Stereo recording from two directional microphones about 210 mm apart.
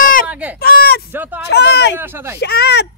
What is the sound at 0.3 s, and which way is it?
Baby cry, 5° right (ahead or behind).